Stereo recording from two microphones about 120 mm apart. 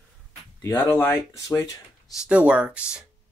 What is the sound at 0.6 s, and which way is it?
Speech, 25° left (ahead or behind).